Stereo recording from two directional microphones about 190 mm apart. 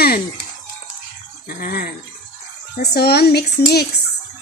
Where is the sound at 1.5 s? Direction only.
50° left (ahead or behind).